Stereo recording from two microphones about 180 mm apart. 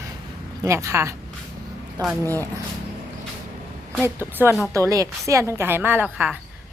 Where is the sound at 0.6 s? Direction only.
15° right (ahead or behind).